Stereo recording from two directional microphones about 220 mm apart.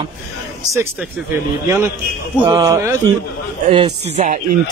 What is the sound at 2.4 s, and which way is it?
Speech, 15° right (ahead or behind).